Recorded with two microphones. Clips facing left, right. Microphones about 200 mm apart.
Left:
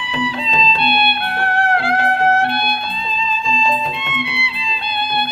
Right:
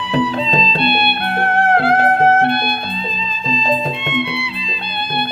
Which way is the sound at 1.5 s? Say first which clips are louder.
Right 4 dB; 25° right (ahead or behind).